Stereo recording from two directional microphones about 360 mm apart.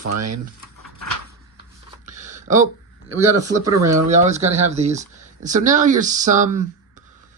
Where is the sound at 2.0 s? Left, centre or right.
Right.